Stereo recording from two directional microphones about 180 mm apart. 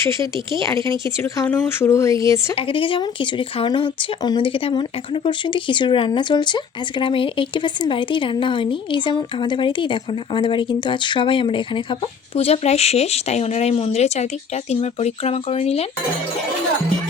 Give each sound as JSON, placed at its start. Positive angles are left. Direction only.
{"t": 0.0, "sound": "speech", "side_deg": 15}
{"t": 2.6, "sound": "speech", "side_deg": 30}